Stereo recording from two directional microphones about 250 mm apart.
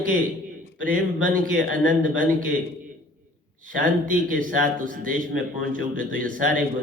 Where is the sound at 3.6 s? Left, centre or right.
Right.